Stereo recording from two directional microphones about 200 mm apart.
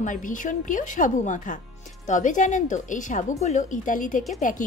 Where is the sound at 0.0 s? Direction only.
40° left (ahead or behind).